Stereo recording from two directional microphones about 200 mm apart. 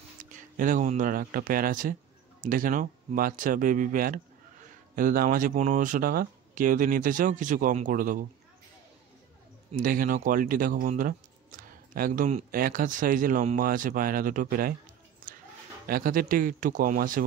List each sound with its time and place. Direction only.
0.2 s speech: 40° right (ahead or behind)
9.7 s speech: 40° right (ahead or behind)
15.3 s a sound: 40° right (ahead or behind)
15.9 s speech: 45° right (ahead or behind)